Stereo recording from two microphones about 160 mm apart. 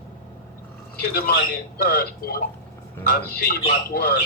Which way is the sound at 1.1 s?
70° left (ahead or behind).